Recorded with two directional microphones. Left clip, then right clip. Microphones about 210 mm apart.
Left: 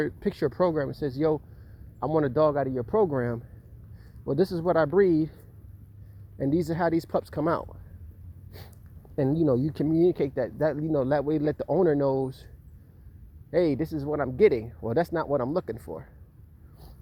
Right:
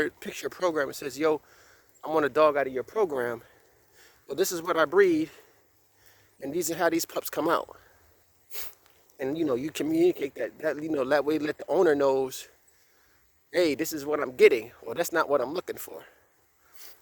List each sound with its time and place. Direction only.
0.0 s speech: 55° right (ahead or behind)
4.4 s speech: 25° right (ahead or behind)
4.7 s speech: 55° right (ahead or behind)
6.5 s speech: 55° right (ahead or behind)
9.7 s speech: 60° right (ahead or behind)
13.5 s speech: 65° right (ahead or behind)